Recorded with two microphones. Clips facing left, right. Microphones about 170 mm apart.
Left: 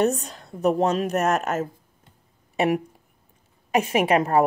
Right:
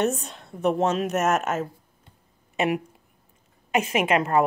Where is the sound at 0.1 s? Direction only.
35° left (ahead or behind).